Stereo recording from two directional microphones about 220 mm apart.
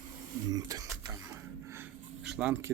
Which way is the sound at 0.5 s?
15° right (ahead or behind).